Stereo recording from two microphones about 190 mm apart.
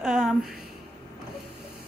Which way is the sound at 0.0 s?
5° right (ahead or behind).